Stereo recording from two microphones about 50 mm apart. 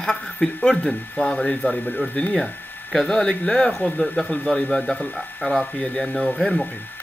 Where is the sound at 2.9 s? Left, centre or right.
Centre.